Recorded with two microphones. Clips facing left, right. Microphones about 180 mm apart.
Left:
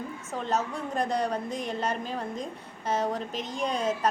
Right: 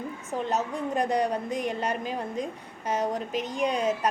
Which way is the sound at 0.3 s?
15° right (ahead or behind).